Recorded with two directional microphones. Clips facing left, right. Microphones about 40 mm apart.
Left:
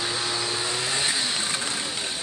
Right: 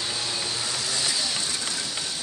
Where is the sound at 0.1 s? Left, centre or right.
Left.